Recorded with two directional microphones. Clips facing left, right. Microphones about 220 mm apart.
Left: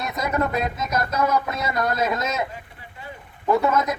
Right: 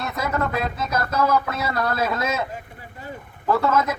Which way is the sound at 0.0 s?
20° left (ahead or behind).